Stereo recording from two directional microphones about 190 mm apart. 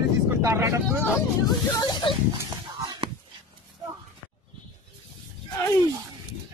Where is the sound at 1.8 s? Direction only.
20° left (ahead or behind).